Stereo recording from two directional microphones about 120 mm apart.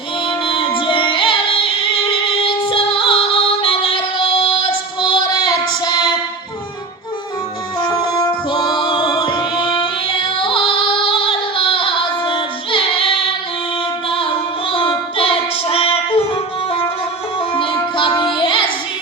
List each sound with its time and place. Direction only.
0.3 s music: 45° left (ahead or behind)
7.8 s music: 40° left (ahead or behind)
14.1 s female singing: 50° left (ahead or behind)
17.5 s child singing: 45° left (ahead or behind)